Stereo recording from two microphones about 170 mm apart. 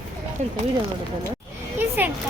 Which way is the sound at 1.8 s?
10° right (ahead or behind).